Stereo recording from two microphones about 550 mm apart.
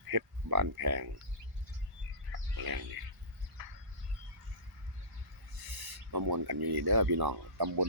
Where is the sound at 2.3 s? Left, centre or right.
Right.